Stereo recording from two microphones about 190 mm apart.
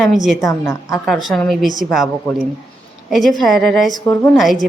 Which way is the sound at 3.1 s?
Centre (ahead or behind).